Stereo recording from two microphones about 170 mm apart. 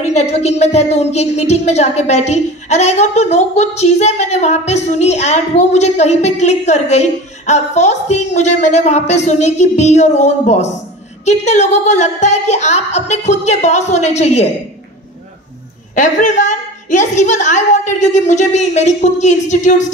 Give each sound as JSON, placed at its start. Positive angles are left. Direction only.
{"t": 0.0, "sound": "a woman's voice", "side_deg": 40}
{"t": 15.9, "sound": "a woman's voice", "side_deg": 50}